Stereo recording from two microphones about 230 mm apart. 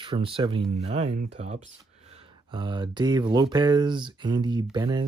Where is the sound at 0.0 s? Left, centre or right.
Right.